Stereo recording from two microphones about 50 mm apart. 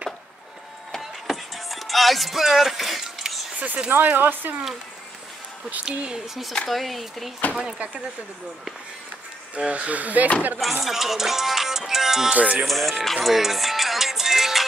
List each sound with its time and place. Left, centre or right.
1.2 s music: centre
3.0 s a sound: centre
3.5 s speech: right
5.9 s music: centre
6.7 s speech: centre
9.6 s speech: right
10.6 s music: centre
12.3 s speech: right
12.6 s speech: centre
13.0 s music: centre